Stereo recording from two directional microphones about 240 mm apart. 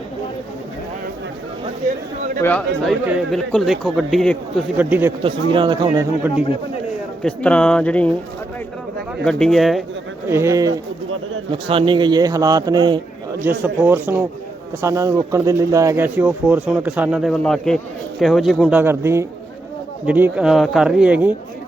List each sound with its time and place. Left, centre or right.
2.4 s a man's voice: centre
5.2 s speech: right
7.2 s a man's voice: centre
9.2 s a man's voice: centre
10.2 s a man's voice: centre